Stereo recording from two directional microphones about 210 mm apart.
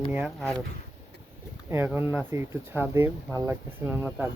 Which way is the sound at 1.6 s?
10° right (ahead or behind).